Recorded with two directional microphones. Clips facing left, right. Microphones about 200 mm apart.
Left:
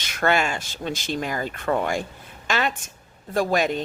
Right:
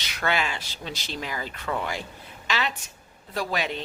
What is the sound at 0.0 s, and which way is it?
A woman's voice, 50° left (ahead or behind).